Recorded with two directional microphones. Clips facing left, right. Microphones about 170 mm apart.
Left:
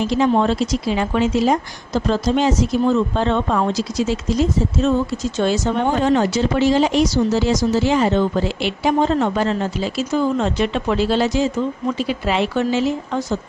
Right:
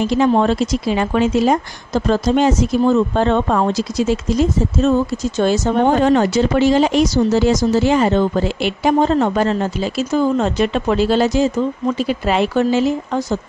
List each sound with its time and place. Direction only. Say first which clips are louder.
0.2 s speech: right 2 dB; 50° right (ahead or behind)